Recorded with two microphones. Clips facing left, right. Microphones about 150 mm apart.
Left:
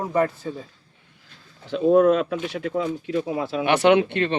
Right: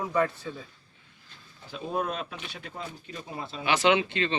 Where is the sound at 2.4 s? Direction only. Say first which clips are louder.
Left 14 dB; 90° left; by 4.4 s 60° left (ahead or behind).